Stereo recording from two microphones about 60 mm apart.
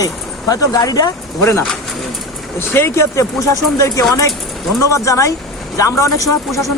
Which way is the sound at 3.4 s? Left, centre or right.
Left.